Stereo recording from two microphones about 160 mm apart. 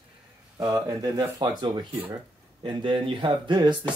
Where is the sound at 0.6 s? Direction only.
20° right (ahead or behind).